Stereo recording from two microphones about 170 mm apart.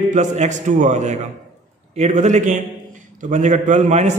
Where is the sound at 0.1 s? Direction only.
45° right (ahead or behind).